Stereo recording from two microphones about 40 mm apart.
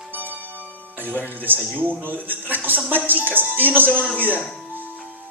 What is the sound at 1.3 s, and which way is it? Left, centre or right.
Speech, right.